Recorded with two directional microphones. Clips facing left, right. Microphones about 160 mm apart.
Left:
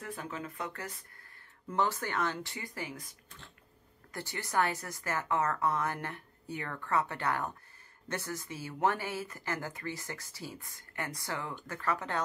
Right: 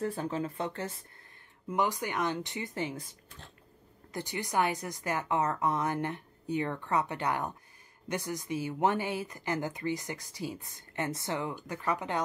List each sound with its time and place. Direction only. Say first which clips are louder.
0.0 s speech: right 8 dB; 30° right (ahead or behind)
1.7 s speech: right 1 dB; 15° right (ahead or behind)
4.1 s speech: right 3 dB; 15° right (ahead or behind)